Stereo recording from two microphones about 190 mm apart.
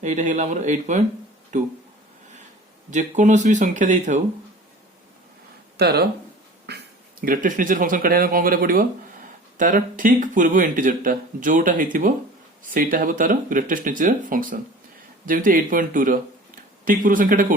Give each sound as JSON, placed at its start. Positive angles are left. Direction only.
{"t": 0.0, "sound": "speech", "side_deg": -40}
{"t": 2.9, "sound": "speech", "side_deg": -40}
{"t": 5.7, "sound": "speech", "side_deg": -60}